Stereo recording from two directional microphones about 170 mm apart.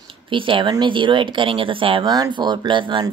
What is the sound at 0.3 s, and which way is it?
Speech, 30° right (ahead or behind).